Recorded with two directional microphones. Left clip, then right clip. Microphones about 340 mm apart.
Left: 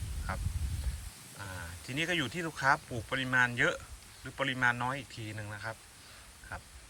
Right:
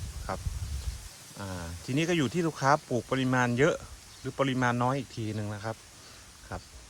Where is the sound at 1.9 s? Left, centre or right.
Centre.